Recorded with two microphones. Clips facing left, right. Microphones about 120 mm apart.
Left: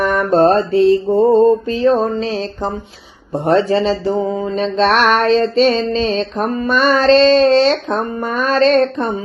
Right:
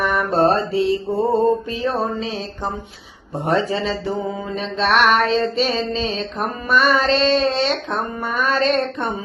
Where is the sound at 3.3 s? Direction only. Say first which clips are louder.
Left 6 dB; 30° left (ahead or behind).